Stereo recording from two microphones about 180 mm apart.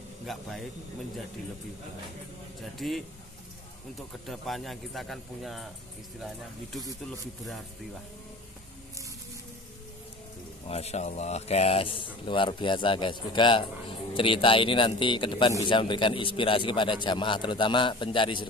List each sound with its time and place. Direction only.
0.3 s a man's voice: centre (ahead or behind)
2.6 s a man's voice: centre (ahead or behind)
4.3 s a man's voice: centre (ahead or behind)
10.7 s speech: 35° left (ahead or behind)